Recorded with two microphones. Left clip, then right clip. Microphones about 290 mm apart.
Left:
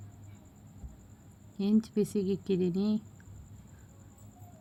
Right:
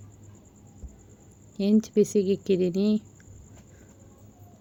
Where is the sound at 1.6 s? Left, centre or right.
Centre.